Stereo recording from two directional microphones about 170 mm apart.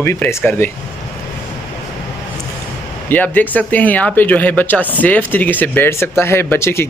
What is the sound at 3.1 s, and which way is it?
Speech, 10° left (ahead or behind).